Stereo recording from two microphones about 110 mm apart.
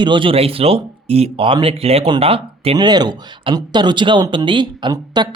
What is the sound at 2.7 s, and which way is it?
Speech, 40° right (ahead or behind).